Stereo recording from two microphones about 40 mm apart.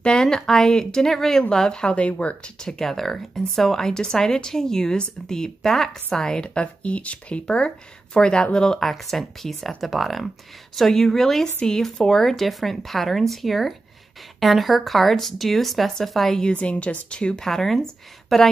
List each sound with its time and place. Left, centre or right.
0.0 s speech: centre
1.5 s speech: centre
2.9 s speech: centre
16.5 s speech: left; by 18.5 s centre